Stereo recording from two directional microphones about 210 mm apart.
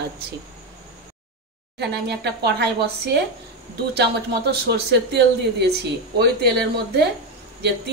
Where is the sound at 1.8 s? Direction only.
50° right (ahead or behind).